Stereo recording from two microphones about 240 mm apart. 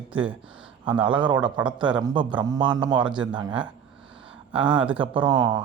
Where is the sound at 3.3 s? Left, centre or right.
Centre.